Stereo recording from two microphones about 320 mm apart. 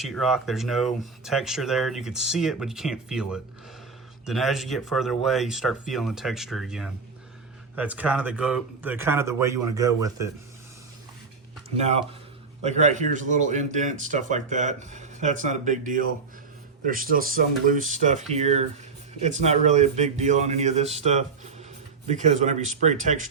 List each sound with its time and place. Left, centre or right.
0.0 s speech: centre
12.6 s speech: right